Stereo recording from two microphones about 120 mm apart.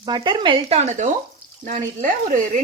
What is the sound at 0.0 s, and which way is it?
Speech, 40° right (ahead or behind).